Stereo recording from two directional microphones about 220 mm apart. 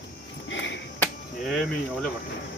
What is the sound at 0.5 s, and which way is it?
Finger snapping, 55° left (ahead or behind).